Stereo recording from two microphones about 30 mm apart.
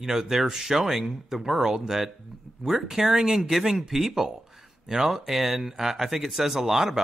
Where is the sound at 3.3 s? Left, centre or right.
Centre.